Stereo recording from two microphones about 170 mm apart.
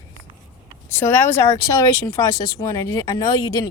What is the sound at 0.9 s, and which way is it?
Speech, 15° left (ahead or behind).